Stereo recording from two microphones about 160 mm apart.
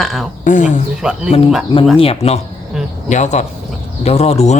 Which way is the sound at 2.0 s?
40° left (ahead or behind).